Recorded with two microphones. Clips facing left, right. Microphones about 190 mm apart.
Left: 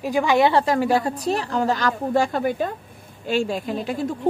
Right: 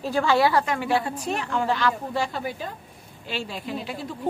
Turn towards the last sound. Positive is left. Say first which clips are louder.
# left 6 dB
turn(degrees=45)  # may be behind; listen again after turning